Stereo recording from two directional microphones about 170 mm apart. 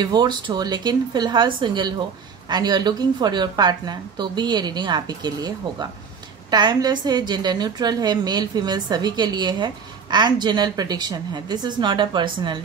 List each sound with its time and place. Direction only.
0.0 s a woman's voice: 25° right (ahead or behind)